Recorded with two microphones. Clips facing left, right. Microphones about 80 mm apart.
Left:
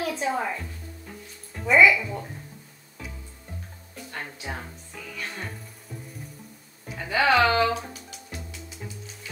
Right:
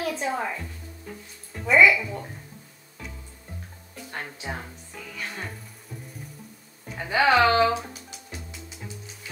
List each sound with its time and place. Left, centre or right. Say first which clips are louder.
0.0 s speech: left 1 dB; centre
3.0 s music: even; centre
4.2 s speech: right 1 dB; centre
5.1 s speech: even; centre
7.0 s speech: right 1 dB; centre